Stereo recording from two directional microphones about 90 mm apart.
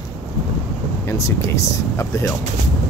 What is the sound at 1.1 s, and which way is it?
Speech, 35° left (ahead or behind).